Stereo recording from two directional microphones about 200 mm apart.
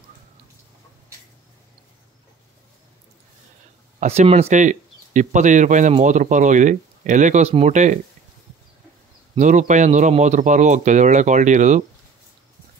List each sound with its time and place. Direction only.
4.0 s speech: 35° right (ahead or behind)
9.3 s speech: 35° right (ahead or behind)